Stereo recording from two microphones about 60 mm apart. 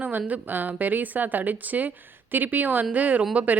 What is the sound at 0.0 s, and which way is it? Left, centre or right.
Speech, right.